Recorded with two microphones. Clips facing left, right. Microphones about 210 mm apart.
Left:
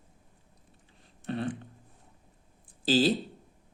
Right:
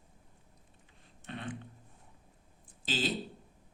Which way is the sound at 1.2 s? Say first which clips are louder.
Left 11 dB; 35° left (ahead or behind).